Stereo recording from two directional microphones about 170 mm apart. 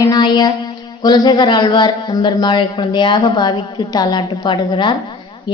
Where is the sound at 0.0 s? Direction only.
25° left (ahead or behind).